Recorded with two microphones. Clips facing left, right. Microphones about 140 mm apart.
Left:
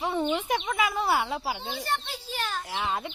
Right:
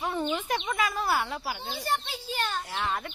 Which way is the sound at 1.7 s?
5° right (ahead or behind).